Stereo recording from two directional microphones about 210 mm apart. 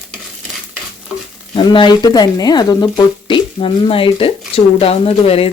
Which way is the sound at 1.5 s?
25° left (ahead or behind).